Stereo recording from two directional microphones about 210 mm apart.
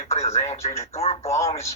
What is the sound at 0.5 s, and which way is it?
Speech, 15° left (ahead or behind).